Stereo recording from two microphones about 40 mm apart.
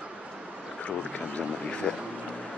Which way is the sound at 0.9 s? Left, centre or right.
Left.